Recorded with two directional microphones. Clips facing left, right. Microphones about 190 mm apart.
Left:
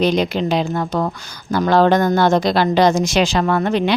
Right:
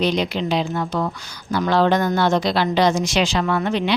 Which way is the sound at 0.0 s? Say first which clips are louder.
Left 4 dB; 45° left (ahead or behind).